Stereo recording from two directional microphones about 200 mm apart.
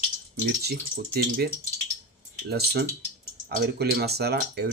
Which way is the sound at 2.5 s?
55° right (ahead or behind).